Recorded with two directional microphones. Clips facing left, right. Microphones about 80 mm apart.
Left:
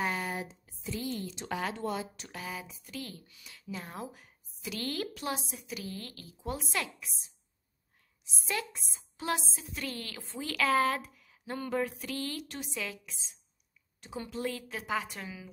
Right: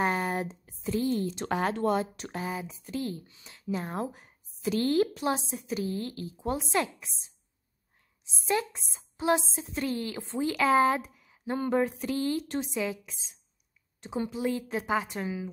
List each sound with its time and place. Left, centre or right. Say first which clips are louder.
0.0 s a sound: right 6 dB; right
1.3 s speech: right 6 dB; right
8.5 s speech: right 7 dB; right